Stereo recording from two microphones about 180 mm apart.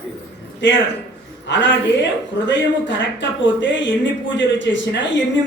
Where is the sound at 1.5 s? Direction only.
85° left.